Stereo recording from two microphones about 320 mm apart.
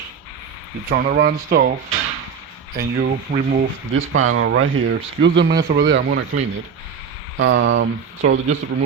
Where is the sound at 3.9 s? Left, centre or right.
Right.